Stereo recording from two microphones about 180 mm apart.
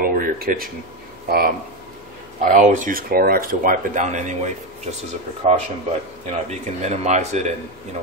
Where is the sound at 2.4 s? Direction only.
45° right (ahead or behind).